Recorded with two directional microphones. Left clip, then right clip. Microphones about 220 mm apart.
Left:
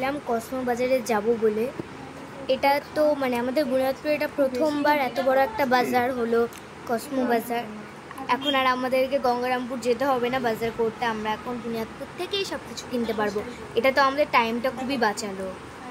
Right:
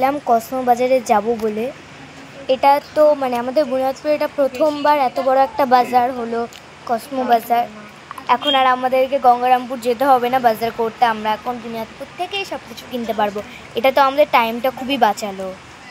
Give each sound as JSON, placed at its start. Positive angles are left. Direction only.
{"t": 0.0, "sound": "speech", "side_deg": -20}
{"t": 13.8, "sound": "speech", "side_deg": -15}